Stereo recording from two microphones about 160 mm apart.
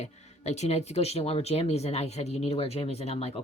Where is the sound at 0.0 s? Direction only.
45° left (ahead or behind).